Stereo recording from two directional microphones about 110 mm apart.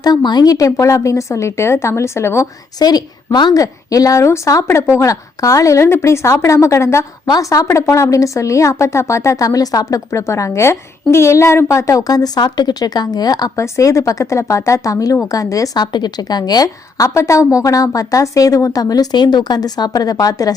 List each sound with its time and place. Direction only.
0.0 s a woman's voice: 40° left (ahead or behind)